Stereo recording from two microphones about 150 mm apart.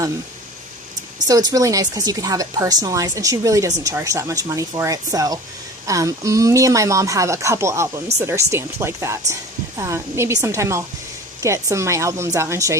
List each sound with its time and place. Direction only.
1.3 s speech: 25° right (ahead or behind)